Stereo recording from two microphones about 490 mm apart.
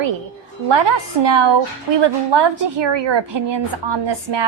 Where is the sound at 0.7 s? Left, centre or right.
Right.